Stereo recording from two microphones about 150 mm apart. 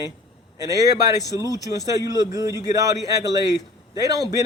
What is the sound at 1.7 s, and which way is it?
Speech, 25° right (ahead or behind).